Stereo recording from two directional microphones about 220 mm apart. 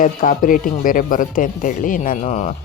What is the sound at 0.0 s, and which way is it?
Speech, 40° left (ahead or behind).